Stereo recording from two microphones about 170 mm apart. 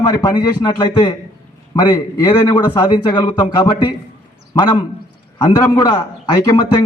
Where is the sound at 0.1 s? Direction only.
20° left (ahead or behind).